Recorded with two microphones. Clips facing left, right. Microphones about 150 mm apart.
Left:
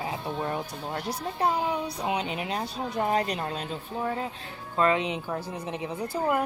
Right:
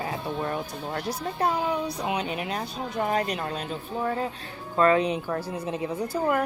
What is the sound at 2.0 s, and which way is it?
Speech, 25° left (ahead or behind).